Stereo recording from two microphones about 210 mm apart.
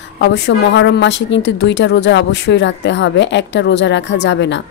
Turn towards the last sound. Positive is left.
turn(degrees=55)  # may be behind; listen again after turning